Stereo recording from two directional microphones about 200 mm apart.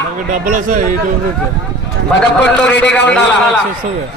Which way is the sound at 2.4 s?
60° left (ahead or behind).